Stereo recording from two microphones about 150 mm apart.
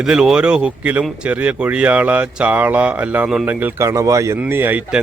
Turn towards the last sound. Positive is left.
turn(degrees=-10)  # may be behind; listen again after turning